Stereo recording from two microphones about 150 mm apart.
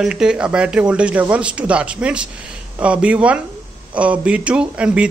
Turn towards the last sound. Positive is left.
turn(degrees=-10)  # may be behind; listen again after turning